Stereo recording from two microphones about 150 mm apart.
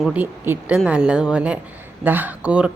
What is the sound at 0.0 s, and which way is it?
A woman's voice, 10° right (ahead or behind).